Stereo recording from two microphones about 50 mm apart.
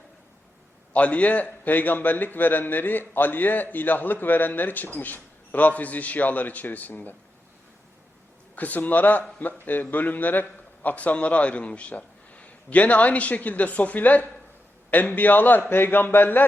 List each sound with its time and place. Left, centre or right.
0.9 s a man's voice: left
8.5 s a man's voice: left